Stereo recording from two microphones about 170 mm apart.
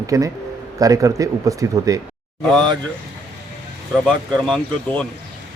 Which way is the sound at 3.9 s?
5° left (ahead or behind).